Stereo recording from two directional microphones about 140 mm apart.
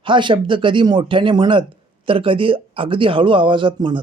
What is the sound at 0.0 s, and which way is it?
Speech, 35° right (ahead or behind).